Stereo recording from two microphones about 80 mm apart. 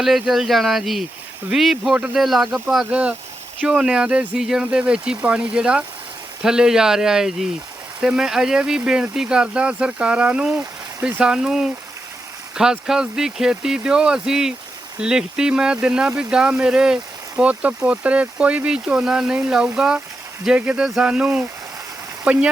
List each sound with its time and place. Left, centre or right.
0.0 s speech: centre
2.9 s speech: centre